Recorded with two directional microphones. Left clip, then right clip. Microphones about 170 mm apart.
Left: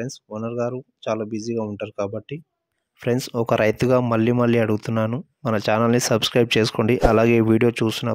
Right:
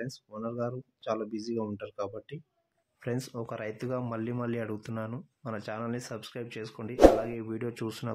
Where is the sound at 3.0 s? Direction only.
60° left (ahead or behind).